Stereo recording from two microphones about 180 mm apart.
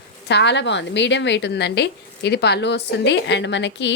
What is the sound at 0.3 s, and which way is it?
A woman's voice, 70° left (ahead or behind).